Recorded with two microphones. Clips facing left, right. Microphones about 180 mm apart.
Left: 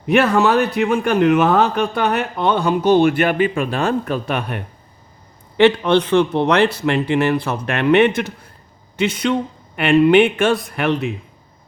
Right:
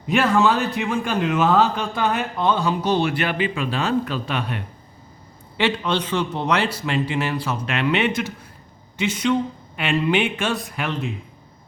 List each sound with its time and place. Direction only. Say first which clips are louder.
0.1 s a man's voice: left 4 dB; 65° left (ahead or behind)